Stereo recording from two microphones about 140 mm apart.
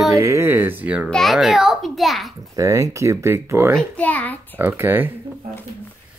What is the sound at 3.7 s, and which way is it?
Speech, 10° left (ahead or behind).